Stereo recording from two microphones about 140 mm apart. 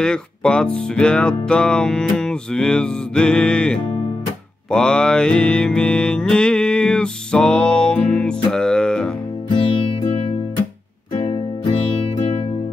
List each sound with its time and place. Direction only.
0.0 s music: 5° left (ahead or behind)
9.5 s music: 35° left (ahead or behind)